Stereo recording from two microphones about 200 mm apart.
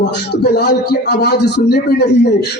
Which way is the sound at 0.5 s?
55° left (ahead or behind).